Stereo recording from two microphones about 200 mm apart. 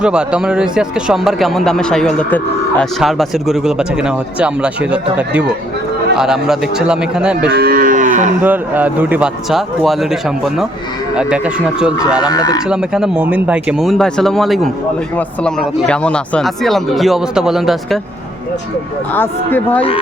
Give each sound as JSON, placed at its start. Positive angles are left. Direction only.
{"t": 0.0, "sound": "speech", "side_deg": -5}
{"t": 7.5, "sound": "moo", "side_deg": -45}
{"t": 8.4, "sound": "speech", "side_deg": -10}
{"t": 12.2, "sound": "speech", "side_deg": 20}
{"t": 12.6, "sound": "speech", "side_deg": -5}
{"t": 19.1, "sound": "speech", "side_deg": 10}